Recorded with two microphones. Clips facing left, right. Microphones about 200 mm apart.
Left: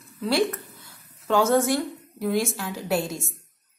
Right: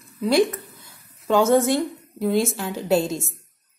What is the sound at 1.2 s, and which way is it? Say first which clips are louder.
A woman's voice: right 3 dB; 20° right (ahead or behind).